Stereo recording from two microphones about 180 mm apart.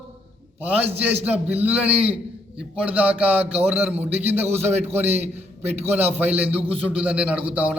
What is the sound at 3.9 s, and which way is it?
Speech, 35° right (ahead or behind).